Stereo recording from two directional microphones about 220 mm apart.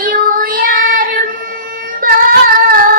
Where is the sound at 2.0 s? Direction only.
40° right (ahead or behind).